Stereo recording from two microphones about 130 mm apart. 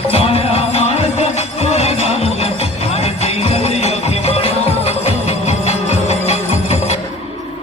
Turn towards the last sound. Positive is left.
turn(degrees=55)  # may be behind; listen again after turning